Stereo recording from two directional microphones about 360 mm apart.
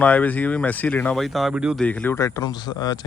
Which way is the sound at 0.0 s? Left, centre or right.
Centre.